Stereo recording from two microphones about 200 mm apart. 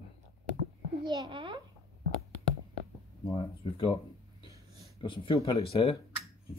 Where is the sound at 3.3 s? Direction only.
25° left (ahead or behind).